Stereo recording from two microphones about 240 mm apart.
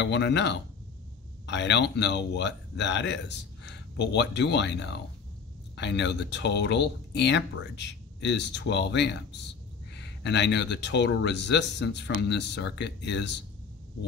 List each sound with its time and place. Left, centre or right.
0.0 s speech: left